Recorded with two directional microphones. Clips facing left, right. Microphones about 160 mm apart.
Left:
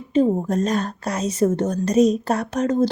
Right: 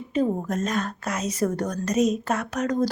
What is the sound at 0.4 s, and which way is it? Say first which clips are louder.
Speech: left 5 dB; 35° left (ahead or behind).